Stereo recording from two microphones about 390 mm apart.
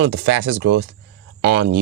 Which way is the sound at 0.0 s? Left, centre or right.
Right.